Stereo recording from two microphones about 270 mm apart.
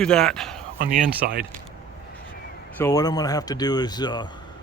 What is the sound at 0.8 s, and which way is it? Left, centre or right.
Speech, right.